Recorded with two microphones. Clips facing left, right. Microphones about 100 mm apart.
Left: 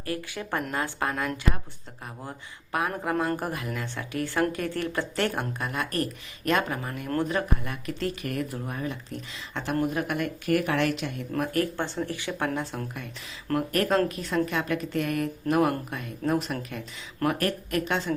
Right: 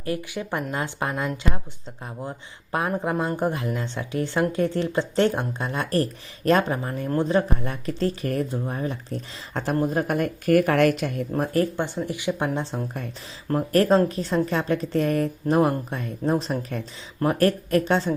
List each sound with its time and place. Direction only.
0.0 s speech: 20° right (ahead or behind)
2.9 s a woman's voice: 25° right (ahead or behind); by 11.3 s 45° right (ahead or behind)
11.3 s speech: 30° right (ahead or behind)
11.8 s speech: 15° right (ahead or behind); by 18.1 s 35° right (ahead or behind)